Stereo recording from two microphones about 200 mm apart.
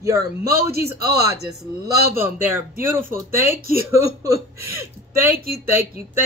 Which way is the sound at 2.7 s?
45° right (ahead or behind).